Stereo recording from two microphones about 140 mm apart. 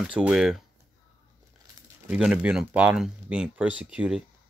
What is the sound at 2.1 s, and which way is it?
Speech, 10° right (ahead or behind).